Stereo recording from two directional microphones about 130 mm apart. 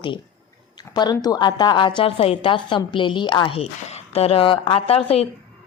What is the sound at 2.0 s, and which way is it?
A woman's voice, 50° left (ahead or behind).